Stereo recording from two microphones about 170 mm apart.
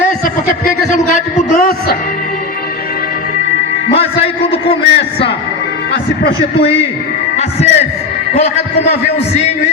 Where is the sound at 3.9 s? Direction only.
35° left (ahead or behind).